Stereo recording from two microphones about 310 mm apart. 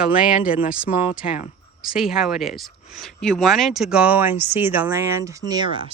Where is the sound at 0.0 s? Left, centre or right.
Centre.